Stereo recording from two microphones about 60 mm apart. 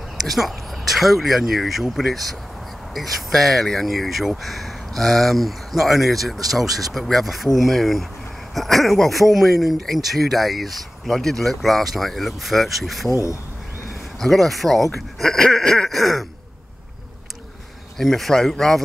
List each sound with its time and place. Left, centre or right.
0.2 s speech: centre
13.1 s speech: left
14.2 s speech: centre
17.9 s speech: centre